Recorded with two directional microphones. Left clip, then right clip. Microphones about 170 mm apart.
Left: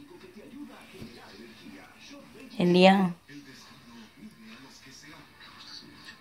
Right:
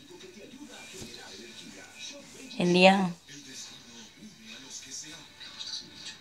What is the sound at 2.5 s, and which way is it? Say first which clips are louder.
Speech: even; 5° left (ahead or behind).